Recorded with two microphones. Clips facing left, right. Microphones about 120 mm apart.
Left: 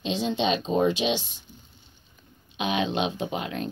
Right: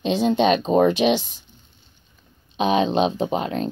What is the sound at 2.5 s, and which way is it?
Speech, 35° right (ahead or behind).